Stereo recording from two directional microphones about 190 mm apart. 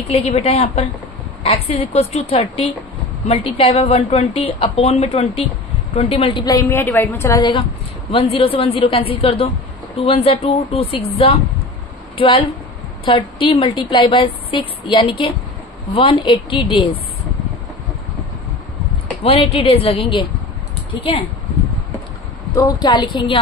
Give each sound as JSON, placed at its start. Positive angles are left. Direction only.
{"t": 0.1, "sound": "a woman's voice", "side_deg": 30}
{"t": 6.6, "sound": "a woman's voice", "side_deg": 10}
{"t": 19.2, "sound": "a woman's voice", "side_deg": 30}
{"t": 22.5, "sound": "a woman's voice", "side_deg": 20}